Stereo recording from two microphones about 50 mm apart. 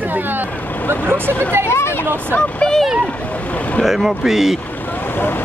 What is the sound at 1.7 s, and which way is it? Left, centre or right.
Speech, left.